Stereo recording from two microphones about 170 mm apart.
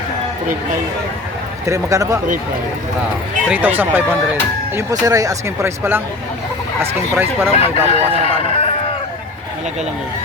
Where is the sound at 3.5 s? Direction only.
10° right (ahead or behind).